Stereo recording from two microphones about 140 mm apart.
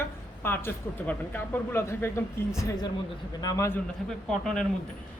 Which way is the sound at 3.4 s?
20° left (ahead or behind).